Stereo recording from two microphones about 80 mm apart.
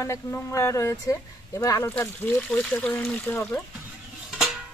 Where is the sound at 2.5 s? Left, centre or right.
Centre.